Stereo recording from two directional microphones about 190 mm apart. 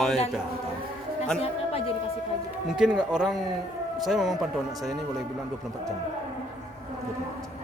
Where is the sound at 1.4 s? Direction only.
30° left (ahead or behind).